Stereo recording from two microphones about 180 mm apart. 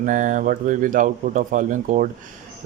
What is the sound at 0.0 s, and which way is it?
Speech, 45° right (ahead or behind).